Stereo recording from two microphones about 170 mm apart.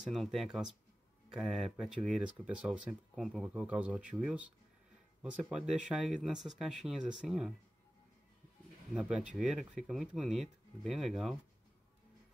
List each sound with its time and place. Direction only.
0.0 s speech: centre (ahead or behind)
9.4 s speech: centre (ahead or behind)